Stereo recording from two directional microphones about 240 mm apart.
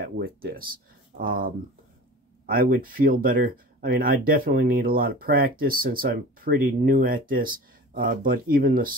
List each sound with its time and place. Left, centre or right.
0.0 s speech: right